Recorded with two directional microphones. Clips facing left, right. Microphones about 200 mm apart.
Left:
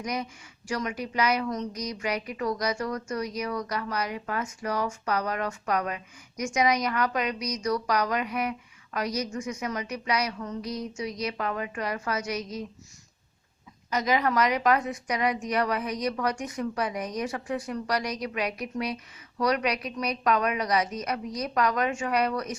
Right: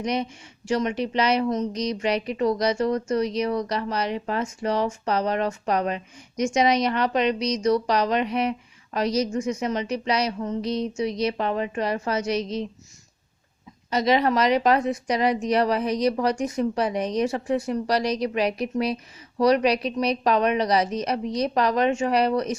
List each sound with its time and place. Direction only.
0.0 s a woman's voice: 25° right (ahead or behind)
13.9 s a woman's voice: 30° right (ahead or behind)